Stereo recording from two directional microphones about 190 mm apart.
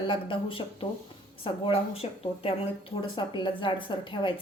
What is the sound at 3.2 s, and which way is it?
A woman's voice, 25° left (ahead or behind).